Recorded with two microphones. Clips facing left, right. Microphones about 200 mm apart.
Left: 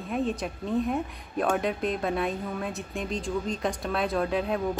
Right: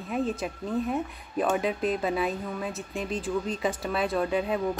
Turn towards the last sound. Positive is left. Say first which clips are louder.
# even
turn(degrees=0)  # may be behind; listen again after turning